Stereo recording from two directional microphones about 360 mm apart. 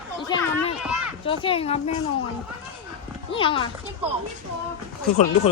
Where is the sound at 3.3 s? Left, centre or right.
Centre.